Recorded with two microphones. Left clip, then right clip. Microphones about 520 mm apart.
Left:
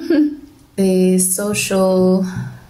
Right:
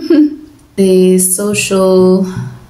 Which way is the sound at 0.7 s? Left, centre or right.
Left.